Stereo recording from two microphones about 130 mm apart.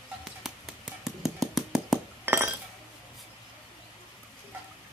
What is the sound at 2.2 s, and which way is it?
Chink, 15° right (ahead or behind).